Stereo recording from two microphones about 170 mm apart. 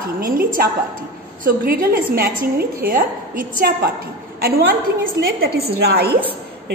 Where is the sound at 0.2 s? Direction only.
60° right (ahead or behind).